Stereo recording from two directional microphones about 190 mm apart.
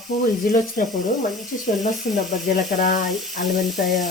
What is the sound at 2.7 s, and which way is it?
Speech, 45° left (ahead or behind).